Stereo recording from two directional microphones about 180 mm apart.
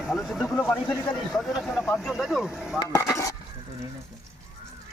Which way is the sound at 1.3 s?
Centre (ahead or behind).